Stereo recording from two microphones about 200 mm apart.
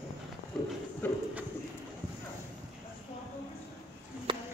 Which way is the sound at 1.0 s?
10° left (ahead or behind).